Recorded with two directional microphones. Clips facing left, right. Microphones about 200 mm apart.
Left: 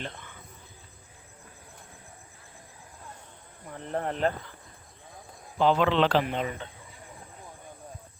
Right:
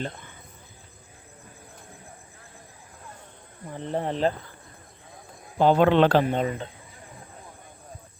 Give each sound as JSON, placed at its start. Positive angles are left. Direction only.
{"t": 0.0, "sound": "speech", "side_deg": -40}
{"t": 3.7, "sound": "speech", "side_deg": -30}
{"t": 5.5, "sound": "speech", "side_deg": -50}
{"t": 6.2, "sound": "speech", "side_deg": -40}